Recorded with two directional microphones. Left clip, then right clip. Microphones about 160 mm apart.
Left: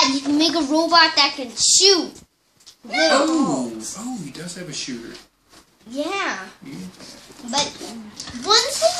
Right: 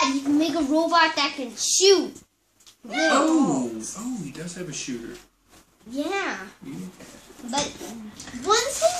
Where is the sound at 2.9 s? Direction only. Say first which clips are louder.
Left 3 dB; 10° right (ahead or behind).